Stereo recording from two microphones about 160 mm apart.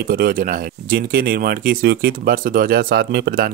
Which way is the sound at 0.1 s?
65° right (ahead or behind).